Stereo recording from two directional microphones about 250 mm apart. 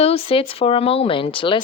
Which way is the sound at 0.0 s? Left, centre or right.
Left.